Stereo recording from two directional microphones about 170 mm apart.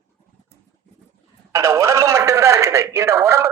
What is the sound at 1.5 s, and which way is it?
Speech, 20° right (ahead or behind).